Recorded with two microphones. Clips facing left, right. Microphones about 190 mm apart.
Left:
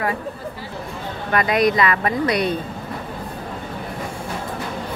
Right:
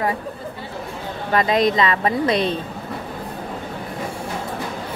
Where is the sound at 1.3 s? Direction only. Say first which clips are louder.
Even; 25° right (ahead or behind).